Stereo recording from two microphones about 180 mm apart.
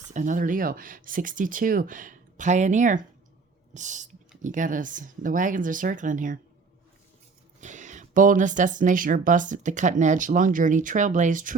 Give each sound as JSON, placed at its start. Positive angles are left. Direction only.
{"t": 0.1, "sound": "speech", "side_deg": -45}
{"t": 7.6, "sound": "speech", "side_deg": -40}